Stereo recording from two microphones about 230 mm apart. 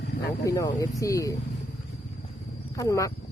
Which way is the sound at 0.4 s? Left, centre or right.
Centre.